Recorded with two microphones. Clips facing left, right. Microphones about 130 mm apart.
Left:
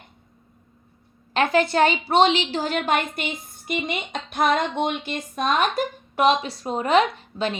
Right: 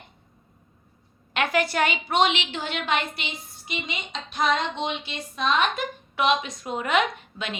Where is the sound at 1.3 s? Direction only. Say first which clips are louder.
Left 4 dB; 30° left (ahead or behind).